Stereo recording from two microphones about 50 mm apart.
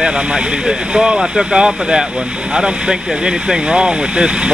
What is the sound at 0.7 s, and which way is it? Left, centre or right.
Speech, centre.